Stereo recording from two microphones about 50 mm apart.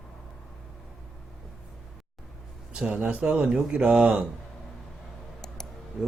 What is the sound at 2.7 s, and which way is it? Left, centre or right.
Speech, right.